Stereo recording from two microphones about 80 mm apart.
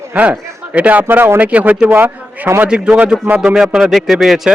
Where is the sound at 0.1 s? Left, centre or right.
Centre.